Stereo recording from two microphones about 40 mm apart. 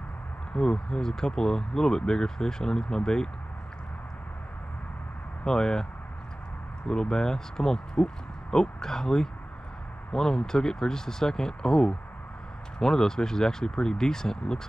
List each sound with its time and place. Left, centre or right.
0.5 s speech: centre
5.4 s speech: centre
6.9 s speech: centre